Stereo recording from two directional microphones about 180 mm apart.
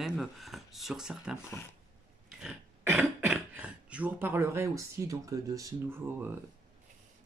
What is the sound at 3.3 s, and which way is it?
Speech, 5° right (ahead or behind).